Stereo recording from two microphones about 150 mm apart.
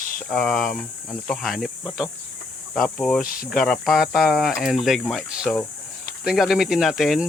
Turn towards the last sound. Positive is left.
turn(degrees=0)  # may be behind; listen again after turning